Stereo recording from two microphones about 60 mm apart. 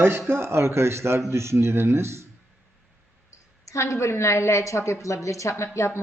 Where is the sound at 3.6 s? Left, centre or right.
Left.